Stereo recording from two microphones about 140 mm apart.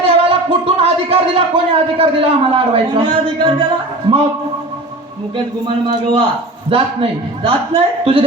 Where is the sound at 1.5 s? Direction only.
40° right (ahead or behind).